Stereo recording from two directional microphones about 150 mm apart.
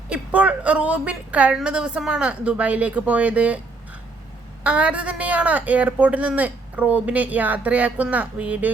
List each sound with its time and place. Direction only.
0.1 s a woman's voice: 10° right (ahead or behind)
4.6 s a woman's voice: 10° right (ahead or behind)